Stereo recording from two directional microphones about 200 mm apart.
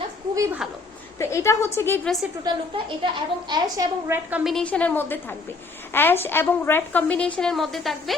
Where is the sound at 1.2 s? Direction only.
15° left (ahead or behind).